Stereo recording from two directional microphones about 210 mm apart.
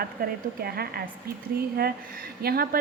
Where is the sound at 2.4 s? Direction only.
45° right (ahead or behind).